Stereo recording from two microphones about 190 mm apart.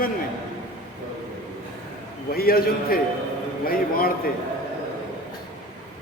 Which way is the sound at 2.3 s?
50° left (ahead or behind).